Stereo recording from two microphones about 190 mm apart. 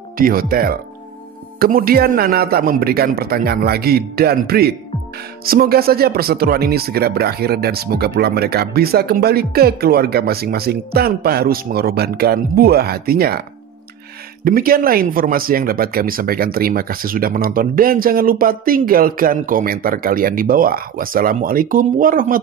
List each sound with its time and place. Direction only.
0.2 s speech: 50° right (ahead or behind)
14.4 s speech: 50° right (ahead or behind)